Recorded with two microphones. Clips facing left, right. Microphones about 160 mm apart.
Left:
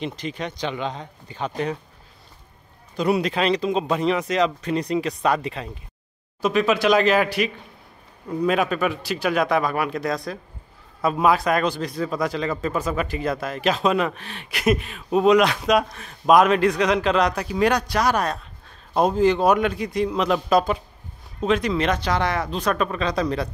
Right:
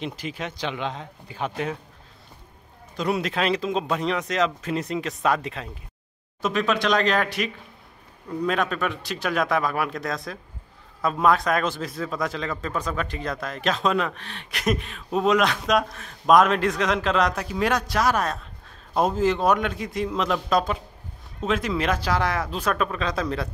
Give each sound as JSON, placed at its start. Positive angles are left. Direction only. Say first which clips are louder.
{"t": 0.0, "sound": "a man's voice", "louder": "left 2 dB", "side_deg": -5}
{"t": 3.0, "sound": "a man's voice", "louder": "left 4 dB", "side_deg": 0}